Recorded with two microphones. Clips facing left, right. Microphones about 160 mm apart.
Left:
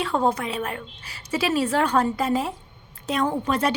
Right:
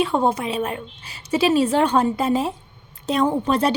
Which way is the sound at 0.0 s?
20° right (ahead or behind).